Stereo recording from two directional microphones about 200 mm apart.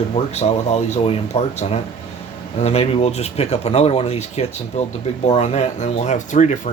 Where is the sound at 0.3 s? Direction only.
30° left (ahead or behind).